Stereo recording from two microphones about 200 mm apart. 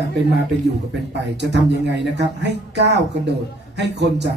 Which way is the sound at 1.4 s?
60° right (ahead or behind).